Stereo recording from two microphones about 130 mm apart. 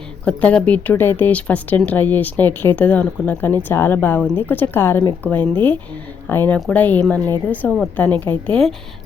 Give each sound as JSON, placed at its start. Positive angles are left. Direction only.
{"t": 0.3, "sound": "speech", "side_deg": 10}